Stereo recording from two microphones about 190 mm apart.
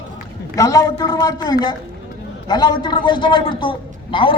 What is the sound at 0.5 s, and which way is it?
A man's voice, 20° left (ahead or behind).